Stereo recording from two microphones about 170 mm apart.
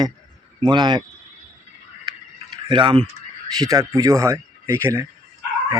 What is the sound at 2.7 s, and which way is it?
Speech, 30° right (ahead or behind).